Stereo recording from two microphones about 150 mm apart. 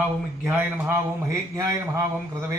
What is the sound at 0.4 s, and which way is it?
A man's voice, 15° right (ahead or behind).